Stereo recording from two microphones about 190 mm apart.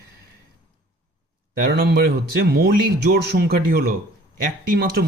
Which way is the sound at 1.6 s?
55° right (ahead or behind).